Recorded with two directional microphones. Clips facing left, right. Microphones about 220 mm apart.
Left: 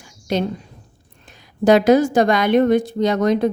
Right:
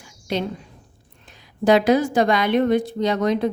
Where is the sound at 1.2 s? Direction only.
45° left (ahead or behind).